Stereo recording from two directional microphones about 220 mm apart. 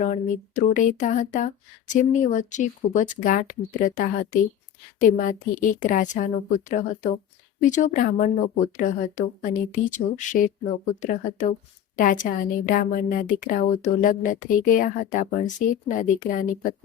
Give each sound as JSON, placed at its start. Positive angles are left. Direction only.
{"t": 0.0, "sound": "a woman's voice", "side_deg": 35}